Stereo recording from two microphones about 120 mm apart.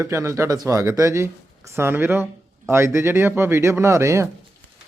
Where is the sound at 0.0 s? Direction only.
25° right (ahead or behind).